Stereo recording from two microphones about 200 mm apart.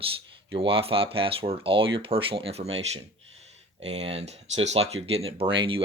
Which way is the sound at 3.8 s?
30° right (ahead or behind).